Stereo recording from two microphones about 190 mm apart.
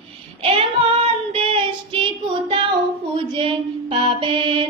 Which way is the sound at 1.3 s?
30° right (ahead or behind).